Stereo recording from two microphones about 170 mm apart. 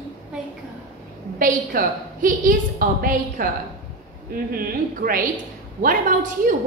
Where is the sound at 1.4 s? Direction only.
55° right (ahead or behind).